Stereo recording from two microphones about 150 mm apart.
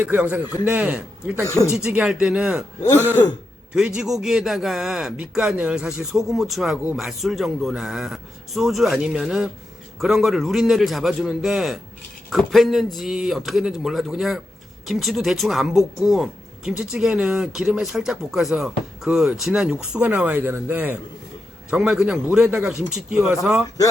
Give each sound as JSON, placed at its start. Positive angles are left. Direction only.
{"t": 0.0, "sound": "a man's voice", "side_deg": -10}
{"t": 1.5, "sound": "speech", "side_deg": 20}
{"t": 1.7, "sound": "speech", "side_deg": -10}
{"t": 3.8, "sound": "speech", "side_deg": -5}